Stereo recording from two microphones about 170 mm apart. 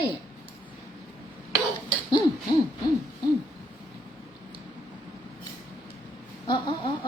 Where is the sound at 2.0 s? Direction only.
25° left (ahead or behind).